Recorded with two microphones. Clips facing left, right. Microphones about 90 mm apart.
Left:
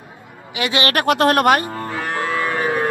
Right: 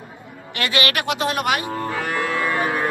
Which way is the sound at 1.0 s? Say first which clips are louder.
Left 8 dB; 55° left (ahead or behind).